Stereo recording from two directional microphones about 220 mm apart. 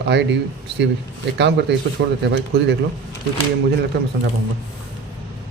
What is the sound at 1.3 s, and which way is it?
Speech, 50° right (ahead or behind).